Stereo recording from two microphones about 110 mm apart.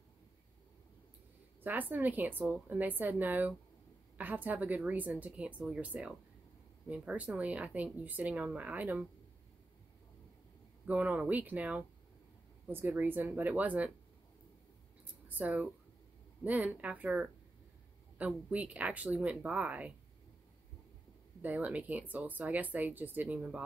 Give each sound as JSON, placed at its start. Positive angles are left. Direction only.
{"t": 1.6, "sound": "speech", "side_deg": -15}
{"t": 10.9, "sound": "speech", "side_deg": -10}
{"t": 15.2, "sound": "speech", "side_deg": -15}
{"t": 21.4, "sound": "speech", "side_deg": -15}